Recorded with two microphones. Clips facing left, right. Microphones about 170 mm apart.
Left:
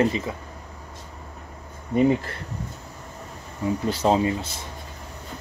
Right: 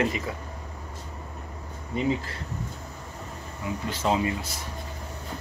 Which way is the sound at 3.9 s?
35° left (ahead or behind).